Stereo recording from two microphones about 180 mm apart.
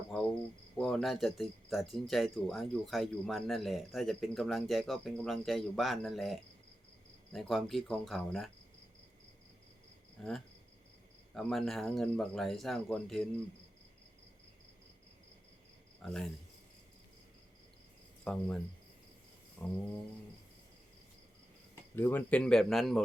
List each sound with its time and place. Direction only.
0.1 s cricket: 5° left (ahead or behind)
0.8 s speech: 5° left (ahead or behind)
10.2 s speech: centre (ahead or behind)
11.3 s speech: centre (ahead or behind)
16.0 s cricket: 5° left (ahead or behind)
18.3 s cricket: 5° left (ahead or behind)
21.9 s speech: 10° left (ahead or behind)